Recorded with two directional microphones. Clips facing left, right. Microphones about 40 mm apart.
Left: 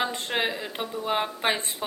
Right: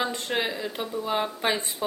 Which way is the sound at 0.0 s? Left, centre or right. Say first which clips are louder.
Even; centre.